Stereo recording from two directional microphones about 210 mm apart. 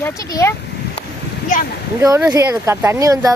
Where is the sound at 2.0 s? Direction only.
15° right (ahead or behind).